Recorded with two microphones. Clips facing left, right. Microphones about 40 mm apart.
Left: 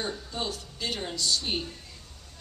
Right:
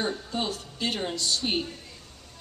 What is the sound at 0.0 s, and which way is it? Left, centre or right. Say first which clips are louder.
Speech: right 4 dB; centre.